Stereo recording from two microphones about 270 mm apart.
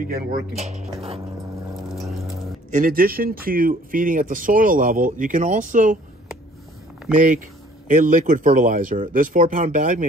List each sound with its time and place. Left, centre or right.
0.0 s speech: right
2.0 s a sound: centre
2.7 s speech: right
7.9 s speech: right